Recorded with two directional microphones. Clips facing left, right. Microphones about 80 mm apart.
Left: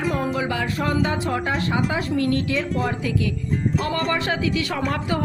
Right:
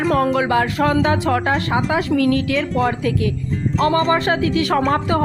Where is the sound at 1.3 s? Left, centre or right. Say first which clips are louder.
Right 6 dB; right.